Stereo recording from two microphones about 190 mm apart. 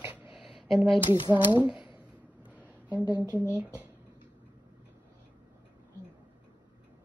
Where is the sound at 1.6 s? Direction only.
5° right (ahead or behind).